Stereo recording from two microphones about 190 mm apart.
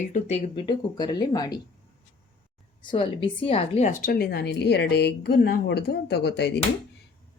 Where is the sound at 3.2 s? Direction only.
30° left (ahead or behind); by 6.6 s 65° left (ahead or behind).